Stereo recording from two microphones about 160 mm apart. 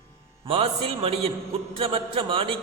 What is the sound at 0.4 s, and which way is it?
Speech, 35° right (ahead or behind).